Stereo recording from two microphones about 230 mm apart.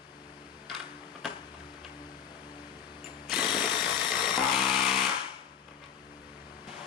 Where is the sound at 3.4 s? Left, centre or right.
Centre.